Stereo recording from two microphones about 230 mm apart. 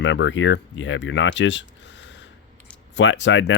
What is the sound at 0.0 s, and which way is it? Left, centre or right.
A man's voice, left.